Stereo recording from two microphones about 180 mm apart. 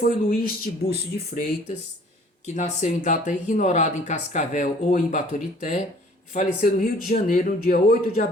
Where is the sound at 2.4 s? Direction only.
40° left (ahead or behind).